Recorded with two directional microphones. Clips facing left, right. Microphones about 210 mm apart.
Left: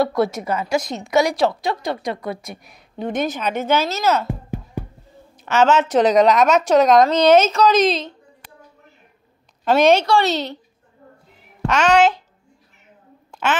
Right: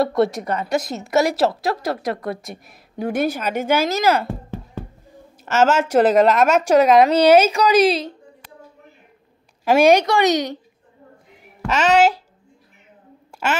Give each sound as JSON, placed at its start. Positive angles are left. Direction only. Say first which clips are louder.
{"t": 0.0, "sound": "a woman's voice", "louder": "right 1 dB", "side_deg": 0}
{"t": 4.3, "sound": "music", "louder": "left 2 dB", "side_deg": 15}
{"t": 5.4, "sound": "a woman's voice", "louder": "left 1 dB", "side_deg": -5}
{"t": 9.7, "sound": "a woman's voice", "louder": "right 1 dB", "side_deg": -10}
{"t": 11.6, "sound": "a woman's voice", "louder": "even", "side_deg": -5}
{"t": 13.3, "sound": "a sound", "louder": "left 1 dB", "side_deg": -5}